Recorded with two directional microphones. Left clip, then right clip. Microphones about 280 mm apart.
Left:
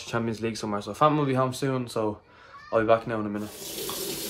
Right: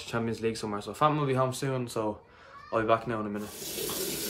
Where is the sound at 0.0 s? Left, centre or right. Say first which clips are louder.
Left 2 dB; centre.